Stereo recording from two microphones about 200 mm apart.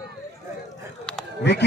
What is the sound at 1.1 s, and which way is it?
Goat, 5° left (ahead or behind).